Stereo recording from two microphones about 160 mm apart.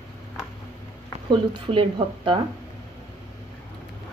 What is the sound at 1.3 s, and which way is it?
Speech, 30° right (ahead or behind).